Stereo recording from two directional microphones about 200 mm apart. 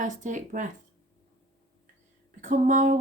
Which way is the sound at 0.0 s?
40° right (ahead or behind).